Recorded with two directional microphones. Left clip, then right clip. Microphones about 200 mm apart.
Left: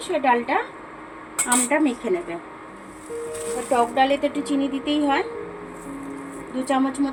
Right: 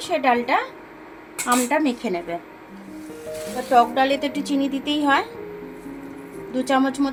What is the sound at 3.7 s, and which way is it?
A woman's voice, 60° right (ahead or behind).